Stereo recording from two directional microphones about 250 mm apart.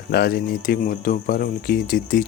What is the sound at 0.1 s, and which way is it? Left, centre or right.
Speech, left.